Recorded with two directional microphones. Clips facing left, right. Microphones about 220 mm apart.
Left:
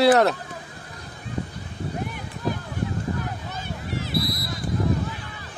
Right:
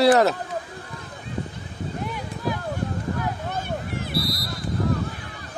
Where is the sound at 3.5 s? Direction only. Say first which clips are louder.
Right 2 dB; 55° right (ahead or behind).